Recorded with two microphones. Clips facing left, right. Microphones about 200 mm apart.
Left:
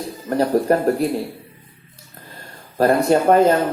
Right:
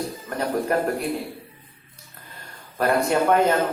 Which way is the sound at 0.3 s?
35° left (ahead or behind).